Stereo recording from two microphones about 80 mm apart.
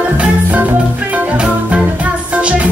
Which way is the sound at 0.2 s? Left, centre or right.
Centre.